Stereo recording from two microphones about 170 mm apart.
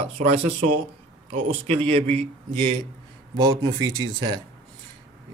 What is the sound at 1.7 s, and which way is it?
Speech, 35° right (ahead or behind).